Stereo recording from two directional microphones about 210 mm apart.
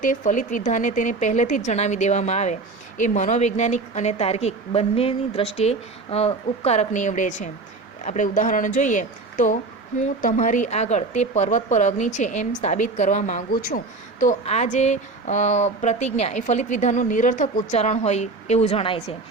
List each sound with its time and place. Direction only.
0.0 s a woman's voice: 35° left (ahead or behind)